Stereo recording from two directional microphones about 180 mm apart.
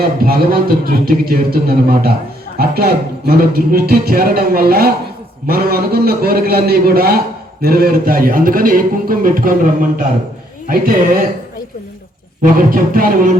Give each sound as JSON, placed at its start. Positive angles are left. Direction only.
{"t": 0.2, "sound": "music", "side_deg": -55}
{"t": 7.6, "sound": "a man's voice", "side_deg": -55}
{"t": 10.7, "sound": "a man's voice", "side_deg": -50}
{"t": 12.4, "sound": "a man's voice", "side_deg": -50}